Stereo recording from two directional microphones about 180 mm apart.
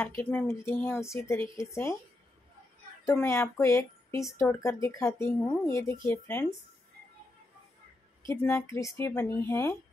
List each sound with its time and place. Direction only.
0.2 s speech: 10° left (ahead or behind)
3.1 s speech: 15° left (ahead or behind)
8.3 s speech: 15° left (ahead or behind)